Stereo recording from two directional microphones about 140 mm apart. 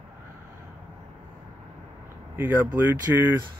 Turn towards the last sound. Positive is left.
turn(degrees=-15)  # may be behind; listen again after turning